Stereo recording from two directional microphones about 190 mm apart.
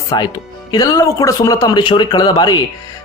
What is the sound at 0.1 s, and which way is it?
A man's voice, 25° left (ahead or behind).